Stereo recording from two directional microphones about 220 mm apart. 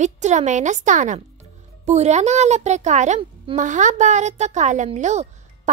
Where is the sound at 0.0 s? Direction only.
30° right (ahead or behind).